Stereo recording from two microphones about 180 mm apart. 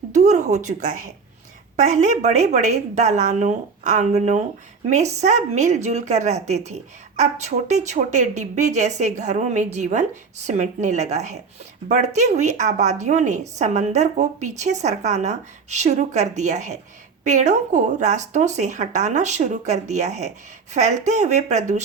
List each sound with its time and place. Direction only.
0.1 s a woman's voice: 40° right (ahead or behind)